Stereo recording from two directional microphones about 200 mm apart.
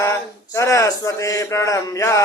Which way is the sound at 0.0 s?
15° left (ahead or behind).